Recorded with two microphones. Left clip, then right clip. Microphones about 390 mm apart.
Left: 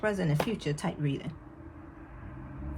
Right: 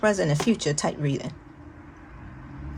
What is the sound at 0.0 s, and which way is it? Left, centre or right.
Speech, right.